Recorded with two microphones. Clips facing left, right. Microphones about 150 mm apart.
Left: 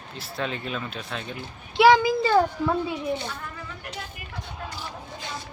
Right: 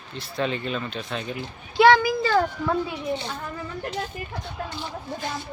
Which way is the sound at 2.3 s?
10° left (ahead or behind).